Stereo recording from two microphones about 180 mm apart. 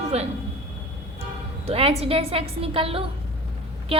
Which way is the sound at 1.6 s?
35° right (ahead or behind).